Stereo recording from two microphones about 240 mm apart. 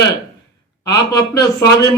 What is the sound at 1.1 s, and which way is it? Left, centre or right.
Speech, centre.